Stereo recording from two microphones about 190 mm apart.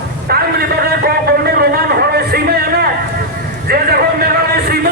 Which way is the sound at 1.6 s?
55° right (ahead or behind).